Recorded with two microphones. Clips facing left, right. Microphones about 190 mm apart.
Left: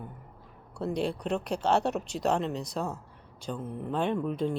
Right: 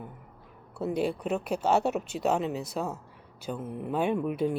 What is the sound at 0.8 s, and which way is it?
Speech, 5° right (ahead or behind).